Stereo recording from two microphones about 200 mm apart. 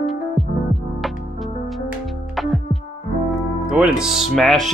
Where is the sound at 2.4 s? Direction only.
Centre (ahead or behind).